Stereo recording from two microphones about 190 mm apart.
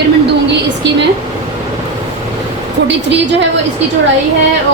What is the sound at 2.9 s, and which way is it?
Speech, 70° right (ahead or behind).